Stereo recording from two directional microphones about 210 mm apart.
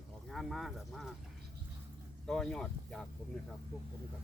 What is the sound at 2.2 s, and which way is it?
Speech, centre (ahead or behind).